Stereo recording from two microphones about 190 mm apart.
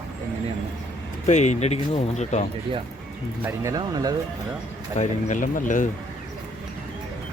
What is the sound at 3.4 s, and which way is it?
Speech, 20° right (ahead or behind).